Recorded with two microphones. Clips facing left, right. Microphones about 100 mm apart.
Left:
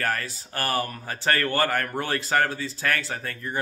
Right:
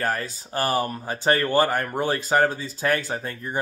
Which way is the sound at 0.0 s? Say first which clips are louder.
Right 2 dB; 20° right (ahead or behind).